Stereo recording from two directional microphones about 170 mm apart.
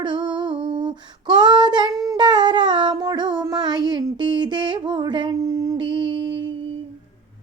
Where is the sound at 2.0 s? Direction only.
25° right (ahead or behind).